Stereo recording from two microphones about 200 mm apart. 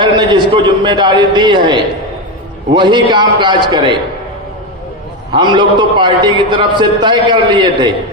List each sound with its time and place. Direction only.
0.0 s a man's voice: 25° right (ahead or behind)
5.3 s a man's voice: 25° right (ahead or behind)